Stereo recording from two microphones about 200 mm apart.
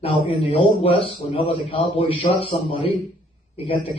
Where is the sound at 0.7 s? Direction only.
30° left (ahead or behind).